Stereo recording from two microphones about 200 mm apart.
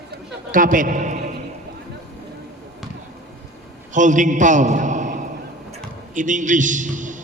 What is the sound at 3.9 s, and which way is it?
A man's voice, 40° right (ahead or behind).